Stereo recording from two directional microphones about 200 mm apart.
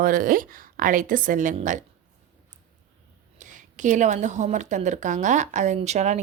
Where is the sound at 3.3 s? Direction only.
40° right (ahead or behind).